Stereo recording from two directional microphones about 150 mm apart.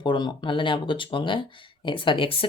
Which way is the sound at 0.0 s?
30° left (ahead or behind).